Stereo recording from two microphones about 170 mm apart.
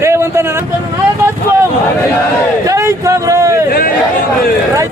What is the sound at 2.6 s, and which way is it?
A man's voice, 20° right (ahead or behind).